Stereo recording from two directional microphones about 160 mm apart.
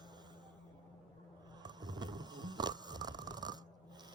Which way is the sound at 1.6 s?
25° right (ahead or behind).